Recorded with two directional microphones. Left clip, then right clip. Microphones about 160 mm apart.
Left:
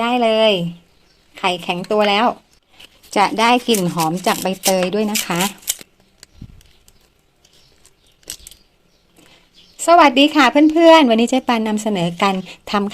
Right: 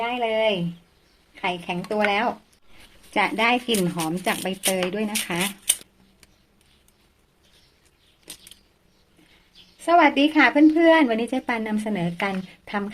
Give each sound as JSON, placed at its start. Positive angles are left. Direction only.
{"t": 0.0, "sound": "speech", "side_deg": 50}
{"t": 3.8, "sound": "speech", "side_deg": 25}
{"t": 4.2, "sound": "speech", "side_deg": 35}
{"t": 9.8, "sound": "speech", "side_deg": 40}